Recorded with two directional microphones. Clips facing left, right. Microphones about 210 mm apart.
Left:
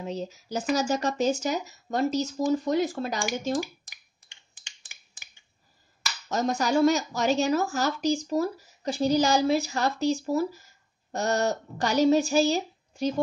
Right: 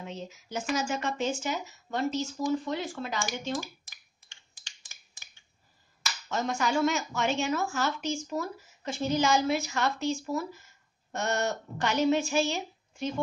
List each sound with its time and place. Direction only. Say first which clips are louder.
0.0 s speech: left 7 dB; 35° left (ahead or behind)
3.5 s a sound: left 6 dB; 15° left (ahead or behind)
4.6 s finger snapping: left 2 dB; 15° left (ahead or behind)
6.2 s speech: left 4 dB; 40° left (ahead or behind)